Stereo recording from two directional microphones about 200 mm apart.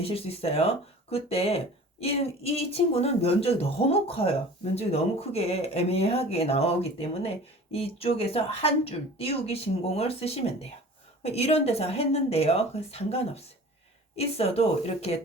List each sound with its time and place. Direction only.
0.0 s speech: 30° left (ahead or behind)